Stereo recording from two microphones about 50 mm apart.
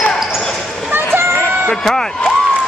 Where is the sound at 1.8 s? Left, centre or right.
Centre.